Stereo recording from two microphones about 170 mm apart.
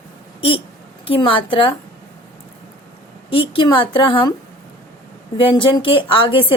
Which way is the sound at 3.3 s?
30° left (ahead or behind).